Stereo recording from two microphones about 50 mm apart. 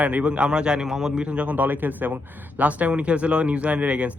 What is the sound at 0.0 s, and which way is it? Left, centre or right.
Speech, right.